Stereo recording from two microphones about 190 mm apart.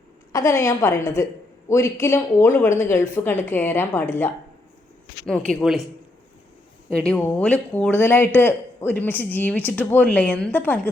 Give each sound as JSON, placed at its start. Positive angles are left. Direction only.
{"t": 0.3, "sound": "a woman's voice", "side_deg": 15}
{"t": 7.1, "sound": "a woman's voice", "side_deg": 10}